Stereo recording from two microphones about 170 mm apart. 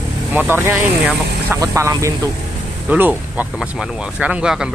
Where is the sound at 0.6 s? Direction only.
15° right (ahead or behind).